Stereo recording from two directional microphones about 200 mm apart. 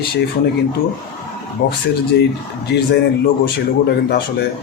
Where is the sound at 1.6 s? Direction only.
60° left (ahead or behind).